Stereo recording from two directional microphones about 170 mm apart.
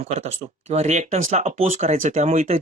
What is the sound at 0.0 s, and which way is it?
Speech, 40° right (ahead or behind).